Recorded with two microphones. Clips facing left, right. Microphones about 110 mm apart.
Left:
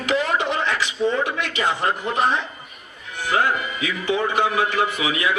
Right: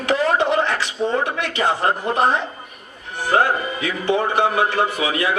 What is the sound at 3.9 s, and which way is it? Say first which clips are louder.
A man's voice: right 3 dB; 45° right (ahead or behind).